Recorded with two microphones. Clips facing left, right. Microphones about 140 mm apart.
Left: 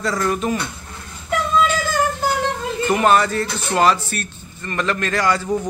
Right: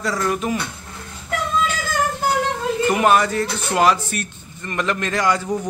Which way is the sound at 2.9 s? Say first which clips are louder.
Left 2 dB; 10° right (ahead or behind).